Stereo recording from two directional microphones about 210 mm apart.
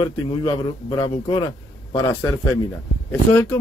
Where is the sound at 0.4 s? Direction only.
20° left (ahead or behind).